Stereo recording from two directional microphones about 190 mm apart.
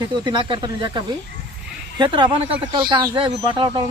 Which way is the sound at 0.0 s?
25° right (ahead or behind).